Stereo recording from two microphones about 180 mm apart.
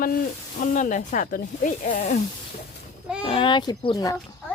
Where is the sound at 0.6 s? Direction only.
45° left (ahead or behind).